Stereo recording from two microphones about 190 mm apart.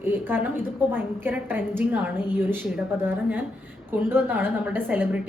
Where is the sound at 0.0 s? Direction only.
10° right (ahead or behind).